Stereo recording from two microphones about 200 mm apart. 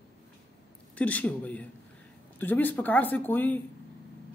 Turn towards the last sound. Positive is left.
turn(degrees=10)  # may be behind; listen again after turning